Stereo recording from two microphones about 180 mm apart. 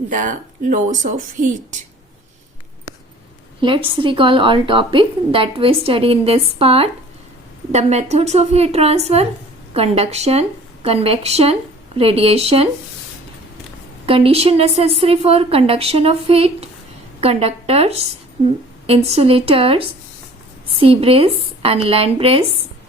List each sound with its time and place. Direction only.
0.1 s speech: 45° right (ahead or behind)
3.6 s a woman's voice: 30° right (ahead or behind)
14.1 s a woman's voice: 35° right (ahead or behind)